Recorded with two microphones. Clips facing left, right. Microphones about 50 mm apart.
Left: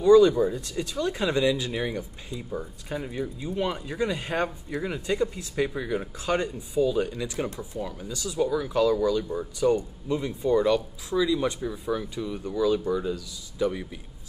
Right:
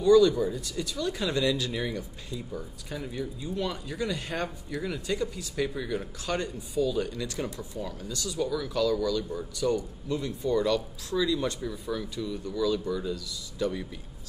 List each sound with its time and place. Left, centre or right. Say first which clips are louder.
0.0 s speech: left 3 dB; left
7.4 s speech: left 3 dB; left
7.8 s speech: left 1 dB; centre